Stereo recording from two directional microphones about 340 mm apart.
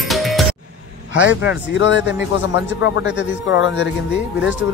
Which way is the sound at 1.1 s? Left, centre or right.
Left.